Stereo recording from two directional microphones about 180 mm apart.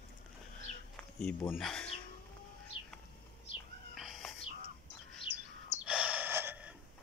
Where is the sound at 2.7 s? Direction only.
30° left (ahead or behind).